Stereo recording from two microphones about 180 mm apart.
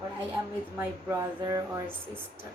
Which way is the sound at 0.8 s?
10° right (ahead or behind).